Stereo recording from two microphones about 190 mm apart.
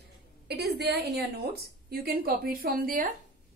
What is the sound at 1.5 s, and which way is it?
A woman's voice, 55° right (ahead or behind).